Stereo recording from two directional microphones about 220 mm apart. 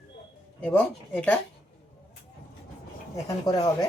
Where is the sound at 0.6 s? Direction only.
5° left (ahead or behind).